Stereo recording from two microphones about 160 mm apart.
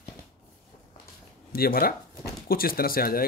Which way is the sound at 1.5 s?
70° left (ahead or behind).